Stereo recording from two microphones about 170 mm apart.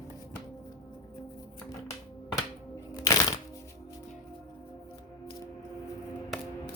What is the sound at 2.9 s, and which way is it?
Music, 25° left (ahead or behind).